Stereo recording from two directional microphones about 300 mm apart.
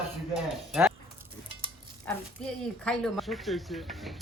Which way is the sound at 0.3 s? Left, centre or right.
Centre.